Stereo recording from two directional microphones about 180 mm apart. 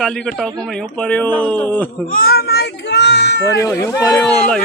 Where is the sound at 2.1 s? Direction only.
55° left (ahead or behind); by 3.6 s 75° left (ahead or behind).